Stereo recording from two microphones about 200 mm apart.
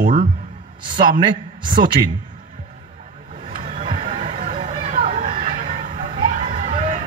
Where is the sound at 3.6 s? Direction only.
45° right (ahead or behind).